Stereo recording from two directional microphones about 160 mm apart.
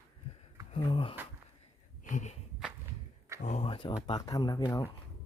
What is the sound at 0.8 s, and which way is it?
Speech, 35° left (ahead or behind).